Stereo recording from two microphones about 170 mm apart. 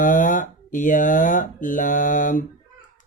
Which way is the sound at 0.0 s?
50° left (ahead or behind).